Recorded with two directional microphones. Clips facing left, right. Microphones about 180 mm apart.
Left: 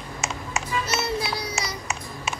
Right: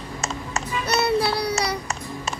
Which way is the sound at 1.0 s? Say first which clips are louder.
Right 6 dB; 65° right (ahead or behind).